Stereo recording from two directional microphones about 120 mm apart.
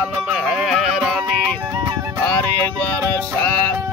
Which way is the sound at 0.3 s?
Centre (ahead or behind).